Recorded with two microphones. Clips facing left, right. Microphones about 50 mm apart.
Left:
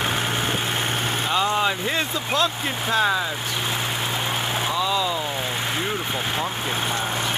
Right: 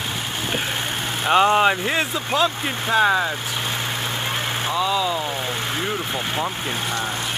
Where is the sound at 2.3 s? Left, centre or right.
Centre.